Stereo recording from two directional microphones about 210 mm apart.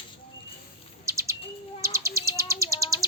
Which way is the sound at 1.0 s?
15° right (ahead or behind).